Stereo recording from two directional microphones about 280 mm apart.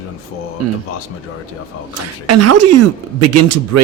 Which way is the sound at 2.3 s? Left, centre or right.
Right.